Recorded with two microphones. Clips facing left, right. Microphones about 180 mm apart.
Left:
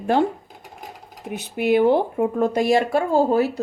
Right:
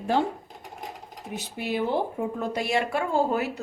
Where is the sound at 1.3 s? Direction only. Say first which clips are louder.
Left 11 dB; 60° left (ahead or behind).